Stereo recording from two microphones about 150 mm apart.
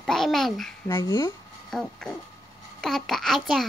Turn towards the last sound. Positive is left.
turn(degrees=0)  # may be behind; listen again after turning